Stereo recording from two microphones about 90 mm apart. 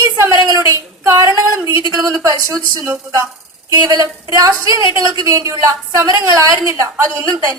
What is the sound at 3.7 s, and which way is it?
A woman's voice, 40° right (ahead or behind).